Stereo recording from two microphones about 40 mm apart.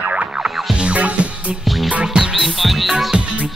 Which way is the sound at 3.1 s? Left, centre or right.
Right.